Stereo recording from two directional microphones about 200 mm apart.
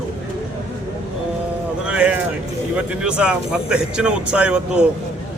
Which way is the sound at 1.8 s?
5° right (ahead or behind).